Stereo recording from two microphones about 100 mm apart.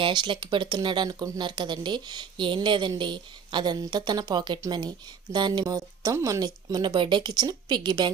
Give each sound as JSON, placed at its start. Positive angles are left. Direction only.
{"t": 0.0, "sound": "speech", "side_deg": -50}